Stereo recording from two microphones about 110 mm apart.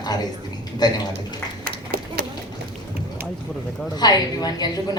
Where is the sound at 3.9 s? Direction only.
40° left (ahead or behind).